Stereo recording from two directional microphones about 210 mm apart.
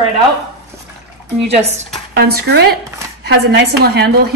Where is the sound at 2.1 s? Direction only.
45° right (ahead or behind).